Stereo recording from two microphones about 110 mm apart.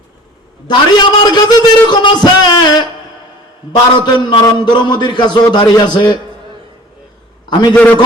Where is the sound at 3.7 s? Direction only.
45° left (ahead or behind).